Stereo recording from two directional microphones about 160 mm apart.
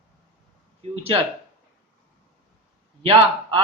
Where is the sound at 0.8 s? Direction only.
35° right (ahead or behind).